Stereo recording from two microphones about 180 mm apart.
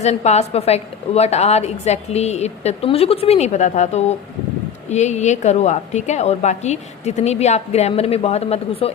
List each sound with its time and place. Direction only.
0.0 s a woman's voice: 35° left (ahead or behind)